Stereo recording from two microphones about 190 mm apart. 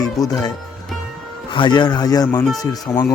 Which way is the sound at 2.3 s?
5° left (ahead or behind).